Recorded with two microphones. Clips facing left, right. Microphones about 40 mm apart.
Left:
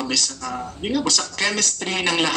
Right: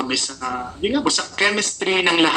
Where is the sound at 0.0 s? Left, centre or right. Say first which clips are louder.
Right 2 dB; right.